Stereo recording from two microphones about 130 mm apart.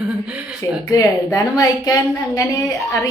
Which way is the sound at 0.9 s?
25° left (ahead or behind).